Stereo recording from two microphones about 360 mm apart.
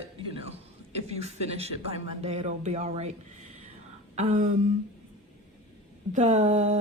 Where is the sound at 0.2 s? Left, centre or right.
Centre.